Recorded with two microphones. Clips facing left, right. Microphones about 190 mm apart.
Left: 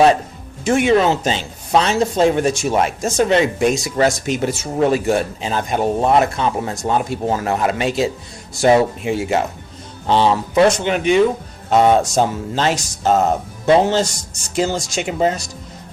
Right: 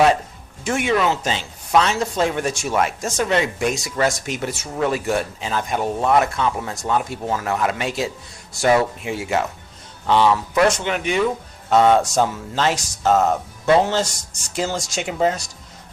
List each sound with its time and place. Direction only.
0.6 s speech: 25° left (ahead or behind)